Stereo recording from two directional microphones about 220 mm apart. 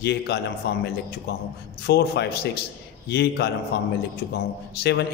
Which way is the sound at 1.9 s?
45° left (ahead or behind).